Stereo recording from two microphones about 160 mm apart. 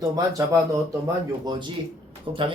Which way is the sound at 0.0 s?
20° right (ahead or behind).